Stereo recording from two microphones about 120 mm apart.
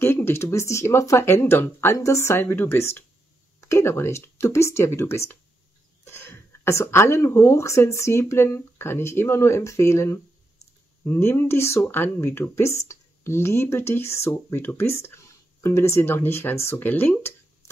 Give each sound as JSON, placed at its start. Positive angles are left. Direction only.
{"t": 0.0, "sound": "speech", "side_deg": 20}